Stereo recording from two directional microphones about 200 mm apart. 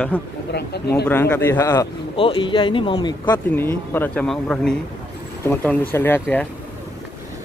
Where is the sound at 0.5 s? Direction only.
55° left (ahead or behind).